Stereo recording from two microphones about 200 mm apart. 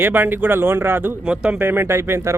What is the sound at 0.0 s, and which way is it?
Speech, 10° right (ahead or behind).